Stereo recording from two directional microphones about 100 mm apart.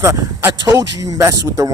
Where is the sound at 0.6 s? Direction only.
35° right (ahead or behind).